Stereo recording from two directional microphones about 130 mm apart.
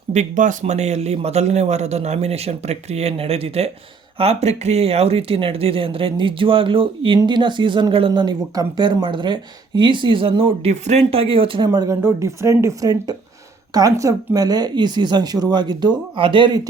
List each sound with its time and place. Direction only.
0.1 s speech: 70° right (ahead or behind)
0.6 s a man's voice: 60° right (ahead or behind)
10.7 s speech: 60° right (ahead or behind); by 16.6 s 40° right (ahead or behind)